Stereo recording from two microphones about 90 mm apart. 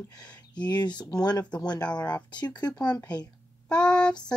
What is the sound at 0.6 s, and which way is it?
Speech, 55° left (ahead or behind).